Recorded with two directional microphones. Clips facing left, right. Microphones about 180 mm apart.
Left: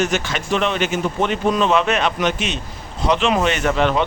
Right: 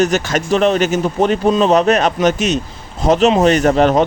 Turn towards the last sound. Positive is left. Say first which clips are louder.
# right 6 dB
turn(degrees=-40)  # may be behind; listen again after turning